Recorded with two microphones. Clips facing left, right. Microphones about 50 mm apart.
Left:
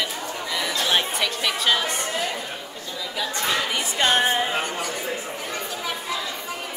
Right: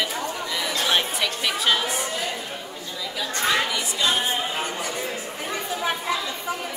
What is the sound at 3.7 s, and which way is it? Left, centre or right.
Speech, left.